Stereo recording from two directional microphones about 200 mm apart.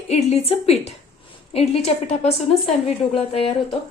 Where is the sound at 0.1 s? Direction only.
30° left (ahead or behind).